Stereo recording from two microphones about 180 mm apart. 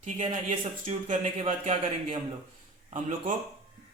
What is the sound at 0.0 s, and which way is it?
Speech, 40° right (ahead or behind).